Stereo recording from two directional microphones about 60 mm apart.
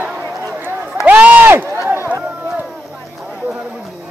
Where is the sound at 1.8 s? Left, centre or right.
Right.